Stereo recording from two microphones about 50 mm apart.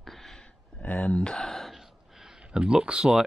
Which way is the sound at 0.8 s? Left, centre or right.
Left.